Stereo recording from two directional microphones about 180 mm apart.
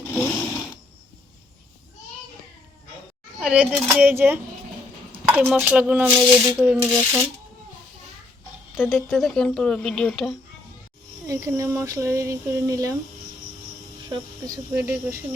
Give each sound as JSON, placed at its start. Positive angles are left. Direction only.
{"t": 0.0, "sound": "sewing machine", "side_deg": 10}
{"t": 0.3, "sound": "a sound", "side_deg": 0}
{"t": 3.4, "sound": "speech", "side_deg": -5}
{"t": 6.1, "sound": "speech", "side_deg": -25}
{"t": 6.6, "sound": "speech", "side_deg": -5}
{"t": 8.8, "sound": "speech", "side_deg": 15}
{"t": 9.0, "sound": "speech", "side_deg": 0}
{"t": 11.3, "sound": "speech", "side_deg": -20}
{"t": 14.1, "sound": "speech", "side_deg": -20}